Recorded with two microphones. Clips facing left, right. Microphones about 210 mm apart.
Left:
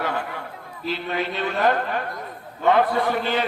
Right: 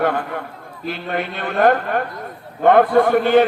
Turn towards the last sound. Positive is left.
turn(degrees=-50)  # may be behind; listen again after turning